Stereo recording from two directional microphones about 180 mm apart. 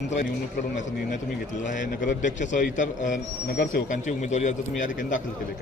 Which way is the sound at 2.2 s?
45° left (ahead or behind).